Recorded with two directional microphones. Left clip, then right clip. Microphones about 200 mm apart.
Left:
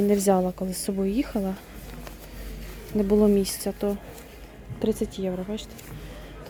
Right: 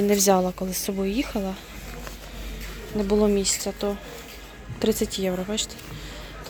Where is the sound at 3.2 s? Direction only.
25° left (ahead or behind).